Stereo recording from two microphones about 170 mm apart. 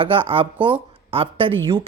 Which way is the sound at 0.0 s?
30° right (ahead or behind).